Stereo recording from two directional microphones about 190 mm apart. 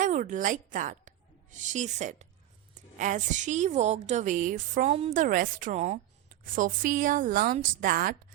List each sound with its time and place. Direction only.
0.0 s a woman's voice: 40° right (ahead or behind)